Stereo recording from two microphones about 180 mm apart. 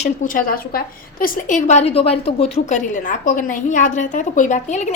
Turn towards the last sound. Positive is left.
turn(degrees=40)  # may be behind; listen again after turning